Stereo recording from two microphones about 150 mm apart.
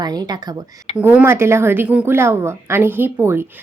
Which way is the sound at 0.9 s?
10° right (ahead or behind).